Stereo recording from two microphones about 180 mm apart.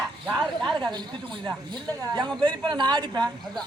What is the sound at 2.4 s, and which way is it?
Speech, 25° right (ahead or behind).